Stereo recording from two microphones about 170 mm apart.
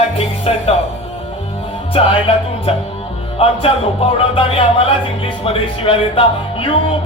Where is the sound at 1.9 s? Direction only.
35° left (ahead or behind).